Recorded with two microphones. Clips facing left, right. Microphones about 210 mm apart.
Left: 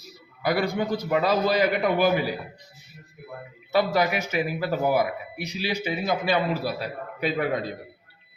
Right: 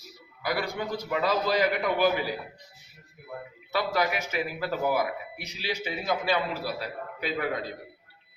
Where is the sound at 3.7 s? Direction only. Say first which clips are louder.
Left 5 dB; 20° left (ahead or behind).